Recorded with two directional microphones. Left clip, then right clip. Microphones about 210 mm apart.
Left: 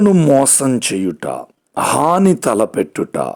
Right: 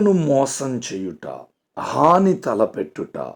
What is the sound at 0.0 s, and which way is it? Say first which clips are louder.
Speech: left 5 dB; 30° left (ahead or behind).